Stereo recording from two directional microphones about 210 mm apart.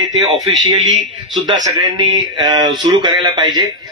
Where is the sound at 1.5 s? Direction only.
20° right (ahead or behind).